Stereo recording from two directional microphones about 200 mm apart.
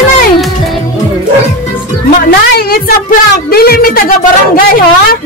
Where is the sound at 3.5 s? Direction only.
50° left (ahead or behind).